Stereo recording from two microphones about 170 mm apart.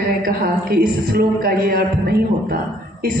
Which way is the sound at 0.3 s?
60° right (ahead or behind).